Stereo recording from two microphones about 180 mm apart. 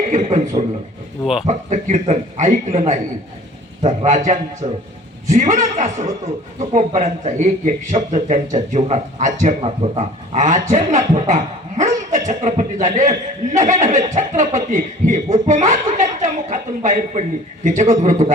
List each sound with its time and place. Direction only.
0.1 s a man's voice: 35° right (ahead or behind)
1.2 s a man's voice: centre (ahead or behind)
1.5 s a man's voice: 40° right (ahead or behind)